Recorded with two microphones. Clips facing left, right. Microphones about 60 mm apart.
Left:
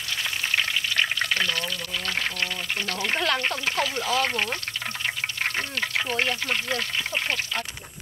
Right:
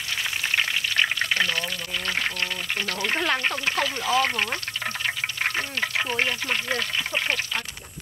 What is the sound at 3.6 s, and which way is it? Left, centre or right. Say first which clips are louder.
Speech: right 1 dB; right.